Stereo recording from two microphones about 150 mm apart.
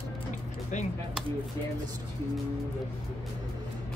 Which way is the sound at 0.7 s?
55° left (ahead or behind).